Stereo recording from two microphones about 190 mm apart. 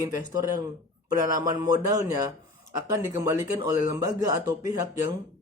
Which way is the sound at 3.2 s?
15° right (ahead or behind).